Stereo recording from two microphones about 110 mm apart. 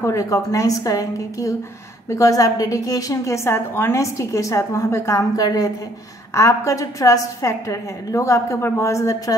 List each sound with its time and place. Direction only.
0.0 s a woman's voice: 30° left (ahead or behind)